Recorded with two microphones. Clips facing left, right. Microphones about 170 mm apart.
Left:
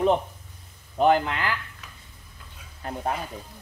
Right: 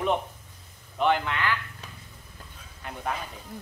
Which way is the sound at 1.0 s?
40° left (ahead or behind).